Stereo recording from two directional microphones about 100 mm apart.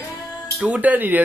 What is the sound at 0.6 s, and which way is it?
Speech, 15° right (ahead or behind).